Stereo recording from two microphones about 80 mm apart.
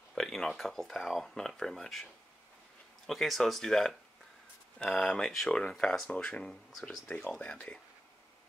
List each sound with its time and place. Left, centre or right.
0.1 s speech: centre
3.1 s speech: centre
7.1 s speech: centre